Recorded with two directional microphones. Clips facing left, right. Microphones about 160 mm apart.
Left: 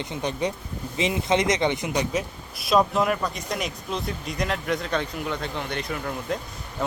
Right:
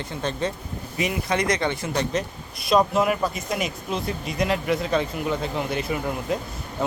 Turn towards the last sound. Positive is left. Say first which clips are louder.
# right 3 dB
turn(degrees=-5)  # may be behind; listen again after turning